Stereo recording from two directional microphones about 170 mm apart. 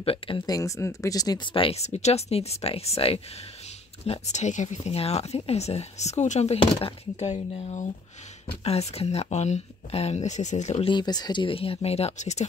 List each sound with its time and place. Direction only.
0.0 s speech: 35° left (ahead or behind)
0.5 s speech: 20° left (ahead or behind); by 12.4 s 40° left (ahead or behind)